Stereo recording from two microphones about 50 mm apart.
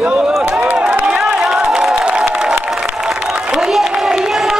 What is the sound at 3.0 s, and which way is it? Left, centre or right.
Applause, centre.